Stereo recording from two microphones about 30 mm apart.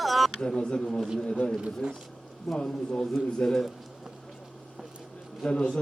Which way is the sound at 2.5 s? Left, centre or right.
Left.